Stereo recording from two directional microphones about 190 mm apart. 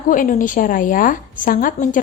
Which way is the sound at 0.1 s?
45° left (ahead or behind).